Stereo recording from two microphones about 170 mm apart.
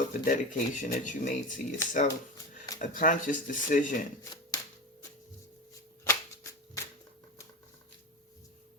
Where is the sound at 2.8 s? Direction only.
50° left (ahead or behind).